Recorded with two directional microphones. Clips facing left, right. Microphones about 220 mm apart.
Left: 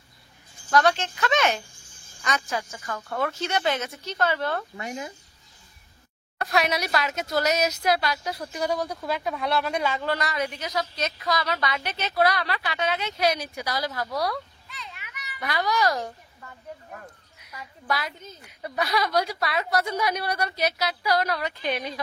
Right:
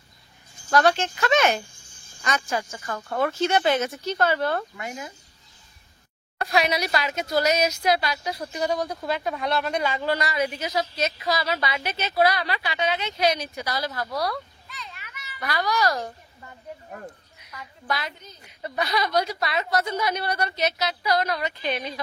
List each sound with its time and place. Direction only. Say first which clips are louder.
0.7 s speech: right 1 dB; 45° right (ahead or behind)
2.9 s speech: right 3 dB; 30° right (ahead or behind)
3.8 s speech: right 3 dB; 40° right (ahead or behind)
4.7 s speech: left 1 dB; 25° left (ahead or behind)
6.4 s a woman's voice: right 1 dB; centre (ahead or behind)
14.0 s a woman's voice: even; centre (ahead or behind)
14.9 s children playing: left 1 dB; 15° left (ahead or behind)
17.8 s a woman's voice: left 1 dB; 5° left (ahead or behind)